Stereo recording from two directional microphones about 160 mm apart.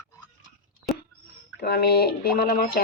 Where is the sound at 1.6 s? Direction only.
75° left (ahead or behind).